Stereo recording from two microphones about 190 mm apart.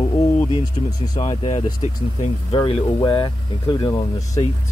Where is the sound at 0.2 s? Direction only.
15° left (ahead or behind).